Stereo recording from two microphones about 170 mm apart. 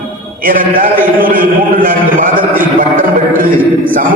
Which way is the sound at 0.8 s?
55° right (ahead or behind).